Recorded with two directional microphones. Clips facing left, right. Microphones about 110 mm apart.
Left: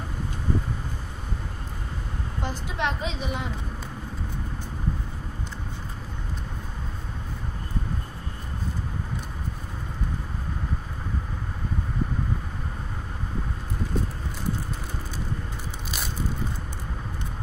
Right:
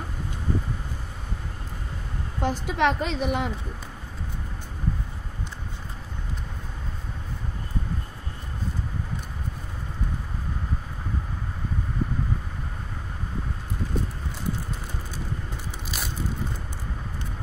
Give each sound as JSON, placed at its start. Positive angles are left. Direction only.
{"t": 2.4, "sound": "a woman's voice", "side_deg": -65}